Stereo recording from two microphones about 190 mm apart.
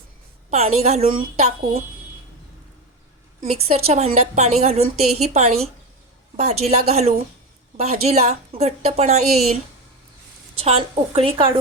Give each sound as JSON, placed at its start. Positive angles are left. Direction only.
{"t": 0.5, "sound": "a woman's voice", "side_deg": -35}
{"t": 3.4, "sound": "a woman's voice", "side_deg": -35}
{"t": 10.6, "sound": "a woman's voice", "side_deg": -30}